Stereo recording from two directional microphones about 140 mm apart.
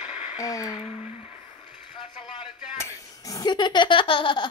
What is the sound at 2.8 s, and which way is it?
Laughter, 25° left (ahead or behind).